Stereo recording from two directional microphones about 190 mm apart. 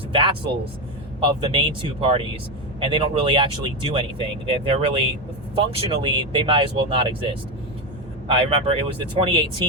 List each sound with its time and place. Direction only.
0.1 s speech: 25° right (ahead or behind)